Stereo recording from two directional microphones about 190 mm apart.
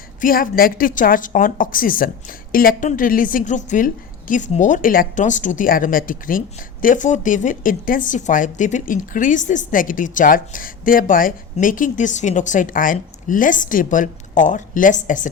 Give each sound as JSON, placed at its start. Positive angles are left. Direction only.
{"t": 0.2, "sound": "speech", "side_deg": 45}